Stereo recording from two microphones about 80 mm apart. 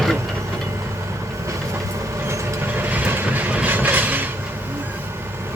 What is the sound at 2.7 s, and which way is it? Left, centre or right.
Mechanisms, right.